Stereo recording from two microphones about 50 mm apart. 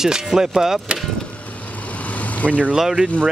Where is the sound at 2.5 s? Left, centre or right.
Right.